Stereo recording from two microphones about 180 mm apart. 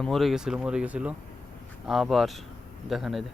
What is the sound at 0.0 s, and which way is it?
Speech, centre (ahead or behind).